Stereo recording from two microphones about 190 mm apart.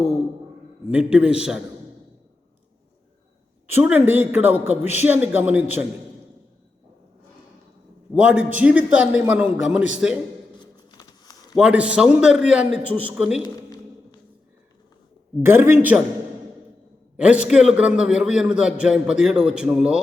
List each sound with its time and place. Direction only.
0.9 s a man's voice: 5° right (ahead or behind)
3.7 s a man's voice: 10° right (ahead or behind)
8.1 s a man's voice: 5° right (ahead or behind)
10.6 s a sound: 20° left (ahead or behind)
11.5 s a man's voice: 5° right (ahead or behind)
15.4 s a man's voice: 10° right (ahead or behind)
17.2 s a man's voice: 5° right (ahead or behind)